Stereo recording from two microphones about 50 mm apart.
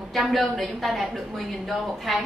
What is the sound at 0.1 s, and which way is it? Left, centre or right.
A woman's voice, centre.